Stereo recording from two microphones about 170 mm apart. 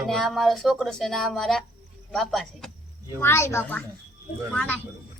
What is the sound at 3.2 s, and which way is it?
A woman's voice, 15° left (ahead or behind).